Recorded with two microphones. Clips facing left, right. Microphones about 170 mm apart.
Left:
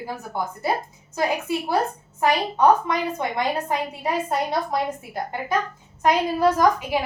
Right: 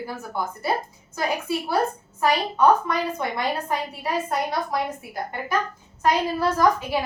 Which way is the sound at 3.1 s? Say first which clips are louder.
Left 2 dB; 20° left (ahead or behind).